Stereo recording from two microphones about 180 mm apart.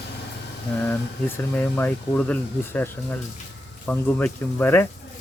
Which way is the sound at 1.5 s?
10° left (ahead or behind).